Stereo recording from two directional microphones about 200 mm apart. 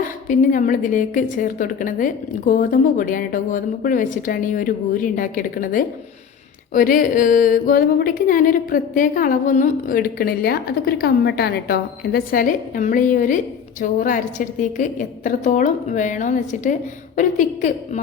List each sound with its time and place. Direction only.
0.0 s a woman's voice: 40° left (ahead or behind)